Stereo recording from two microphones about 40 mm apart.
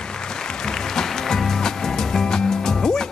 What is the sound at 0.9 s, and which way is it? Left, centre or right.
Music, centre.